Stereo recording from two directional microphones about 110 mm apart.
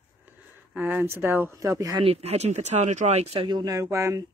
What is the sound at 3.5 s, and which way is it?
Speech, 35° right (ahead or behind).